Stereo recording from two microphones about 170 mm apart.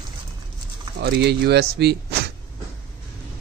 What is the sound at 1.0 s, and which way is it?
Speech, 70° right (ahead or behind).